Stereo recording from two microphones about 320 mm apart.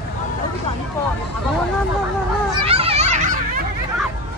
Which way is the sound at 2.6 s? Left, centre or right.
Centre.